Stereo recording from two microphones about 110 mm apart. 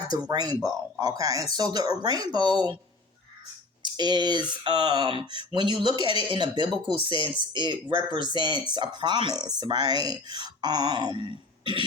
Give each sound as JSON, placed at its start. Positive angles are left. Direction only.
{"t": 0.1, "sound": "speech", "side_deg": -40}
{"t": 3.8, "sound": "speech", "side_deg": -40}